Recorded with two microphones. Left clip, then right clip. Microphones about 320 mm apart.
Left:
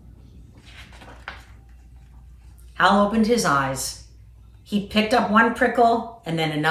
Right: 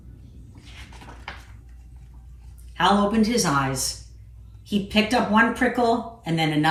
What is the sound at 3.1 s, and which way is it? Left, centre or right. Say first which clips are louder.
Speech: left 3 dB; left.